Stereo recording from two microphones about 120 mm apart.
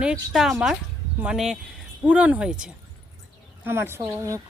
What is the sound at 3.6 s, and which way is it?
Speech, 20° right (ahead or behind).